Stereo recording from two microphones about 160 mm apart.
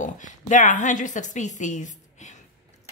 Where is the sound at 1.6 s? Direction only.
50° left (ahead or behind).